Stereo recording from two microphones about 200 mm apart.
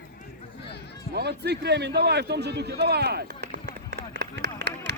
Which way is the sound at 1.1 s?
55° right (ahead or behind).